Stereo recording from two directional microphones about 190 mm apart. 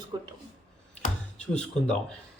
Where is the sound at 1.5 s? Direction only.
5° left (ahead or behind).